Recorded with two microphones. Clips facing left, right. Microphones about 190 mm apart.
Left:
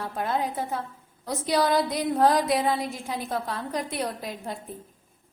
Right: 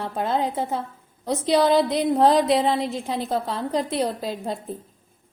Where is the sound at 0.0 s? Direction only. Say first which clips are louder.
Right 4 dB; 25° right (ahead or behind).